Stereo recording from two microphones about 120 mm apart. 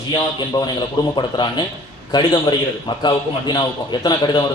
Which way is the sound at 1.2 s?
40° left (ahead or behind).